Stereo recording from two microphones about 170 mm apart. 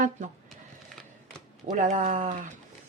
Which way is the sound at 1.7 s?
50° right (ahead or behind).